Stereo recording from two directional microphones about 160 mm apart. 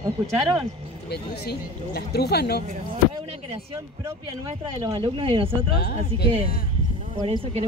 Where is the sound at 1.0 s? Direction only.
90° left.